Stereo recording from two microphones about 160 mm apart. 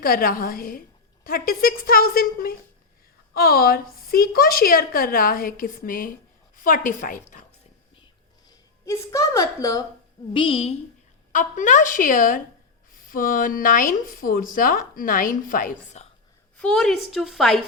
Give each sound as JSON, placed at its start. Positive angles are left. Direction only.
{"t": 0.0, "sound": "speech", "side_deg": 65}
{"t": 8.4, "sound": "a woman's voice", "side_deg": 20}
{"t": 10.3, "sound": "a woman's voice", "side_deg": 35}
{"t": 11.3, "sound": "speech", "side_deg": 55}
{"t": 16.6, "sound": "a woman's voice", "side_deg": 5}